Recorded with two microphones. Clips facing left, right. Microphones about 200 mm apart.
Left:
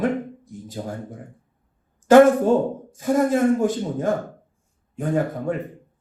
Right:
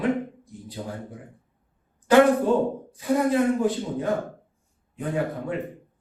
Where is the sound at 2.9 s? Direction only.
45° left (ahead or behind).